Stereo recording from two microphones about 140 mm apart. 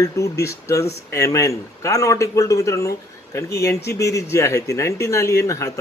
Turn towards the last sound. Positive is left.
turn(degrees=20)  # may be behind; listen again after turning